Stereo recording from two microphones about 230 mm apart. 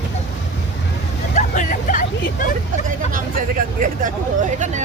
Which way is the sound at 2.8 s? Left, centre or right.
Right.